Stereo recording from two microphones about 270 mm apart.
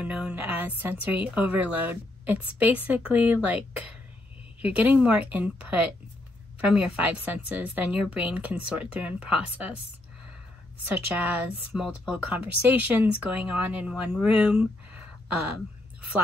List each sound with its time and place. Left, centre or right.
0.0 s a woman's voice: centre
11.1 s a woman's voice: centre